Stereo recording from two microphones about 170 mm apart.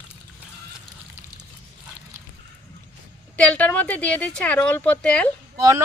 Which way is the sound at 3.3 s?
10° left (ahead or behind).